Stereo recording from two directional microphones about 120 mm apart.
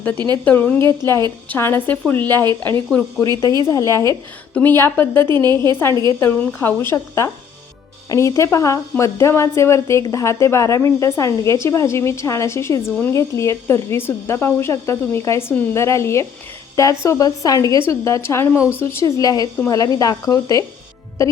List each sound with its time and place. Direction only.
0.4 s a woman's voice: 15° left (ahead or behind)
5.3 s a woman's voice: 35° right (ahead or behind)
6.1 s speech: 20° left (ahead or behind)